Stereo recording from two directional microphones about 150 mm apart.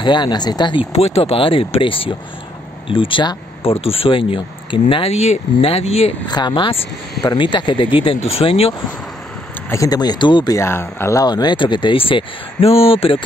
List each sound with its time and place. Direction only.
0.0 s speech: 30° left (ahead or behind)
6.2 s speech: 30° left (ahead or behind)
9.7 s speech: 25° left (ahead or behind)